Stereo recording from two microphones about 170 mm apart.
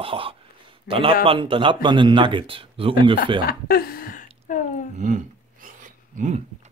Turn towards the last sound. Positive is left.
turn(degrees=-45)  # may be behind; listen again after turning